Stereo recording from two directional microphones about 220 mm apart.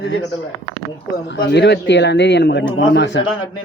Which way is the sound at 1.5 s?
50° left (ahead or behind).